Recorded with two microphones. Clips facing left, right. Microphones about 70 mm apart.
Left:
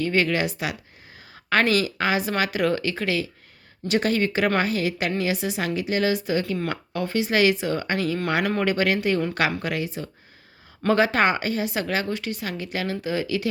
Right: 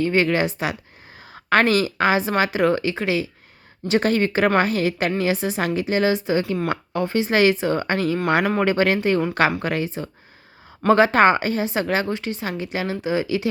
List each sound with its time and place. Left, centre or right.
0.0 s a woman's voice: right
3.8 s a woman's voice: right